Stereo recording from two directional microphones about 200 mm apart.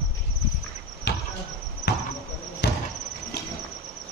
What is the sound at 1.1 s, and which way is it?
Insect, 55° left (ahead or behind).